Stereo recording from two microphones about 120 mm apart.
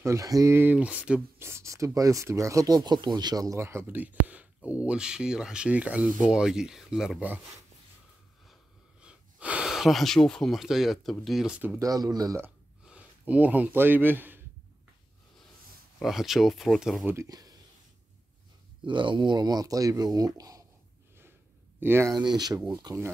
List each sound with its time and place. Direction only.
0.0 s speech: 25° right (ahead or behind); by 1.2 s 10° right (ahead or behind)
1.4 s speech: 25° right (ahead or behind); by 7.2 s 5° right (ahead or behind)
9.0 s speech: 10° right (ahead or behind)
11.8 s speech: 30° right (ahead or behind)
12.8 s speech: 10° right (ahead or behind)
16.0 s speech: centre (ahead or behind)
17.0 s speech: 20° right (ahead or behind)
17.3 s a sound: 30° right (ahead or behind)
18.9 s speech: 40° right (ahead or behind)
20.3 s a sound: 30° right (ahead or behind)
21.7 s speech: 20° right (ahead or behind)
22.7 s speech: 35° right (ahead or behind)